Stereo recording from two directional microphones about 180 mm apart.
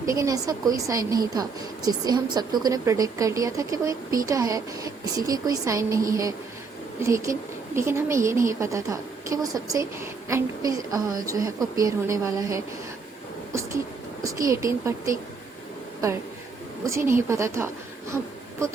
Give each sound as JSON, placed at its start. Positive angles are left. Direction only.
{"t": 0.0, "sound": "a woman's voice", "side_deg": -20}
{"t": 7.0, "sound": "a woman's voice", "side_deg": -15}
{"t": 14.3, "sound": "a woman's voice", "side_deg": -15}
{"t": 16.8, "sound": "a woman's voice", "side_deg": -15}